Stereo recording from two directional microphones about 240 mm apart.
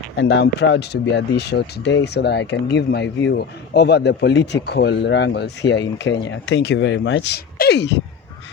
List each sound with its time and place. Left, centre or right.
0.2 s speech: left